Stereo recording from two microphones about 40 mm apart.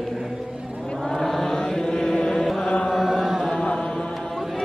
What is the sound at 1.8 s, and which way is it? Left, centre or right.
Chant, left.